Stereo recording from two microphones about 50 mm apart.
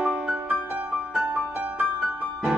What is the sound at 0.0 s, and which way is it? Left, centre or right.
Music, right.